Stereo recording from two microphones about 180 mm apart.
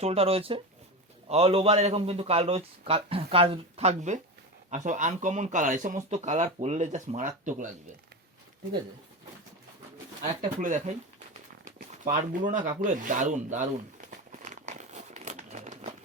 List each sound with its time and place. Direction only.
0.0 s speech: 35° right (ahead or behind)
10.6 s speech: 45° right (ahead or behind)
14.3 s crumpling: 45° right (ahead or behind)